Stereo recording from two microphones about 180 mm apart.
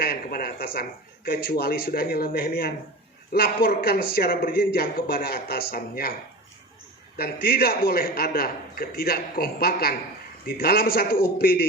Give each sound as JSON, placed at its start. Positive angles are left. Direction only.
{"t": 0.0, "sound": "speech", "side_deg": 55}
{"t": 7.2, "sound": "speech", "side_deg": 60}